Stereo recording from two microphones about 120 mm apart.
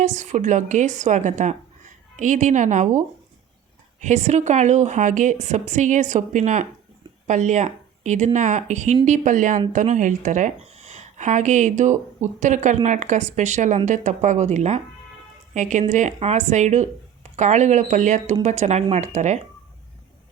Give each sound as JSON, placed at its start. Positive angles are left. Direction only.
{"t": 0.0, "sound": "speech", "side_deg": -90}
{"t": 4.0, "sound": "a woman's voice", "side_deg": -70}
{"t": 15.5, "sound": "a woman's voice", "side_deg": -90}
{"t": 18.4, "sound": "speech", "side_deg": -75}